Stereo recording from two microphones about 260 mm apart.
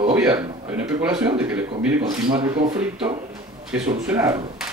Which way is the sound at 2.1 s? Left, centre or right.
Centre.